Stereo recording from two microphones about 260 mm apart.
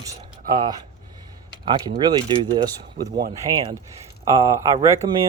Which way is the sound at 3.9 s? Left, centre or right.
Centre.